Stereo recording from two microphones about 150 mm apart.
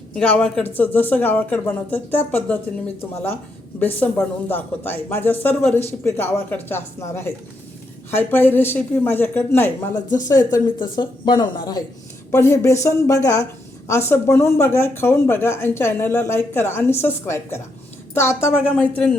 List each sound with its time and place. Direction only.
0.1 s speech: 5° left (ahead or behind)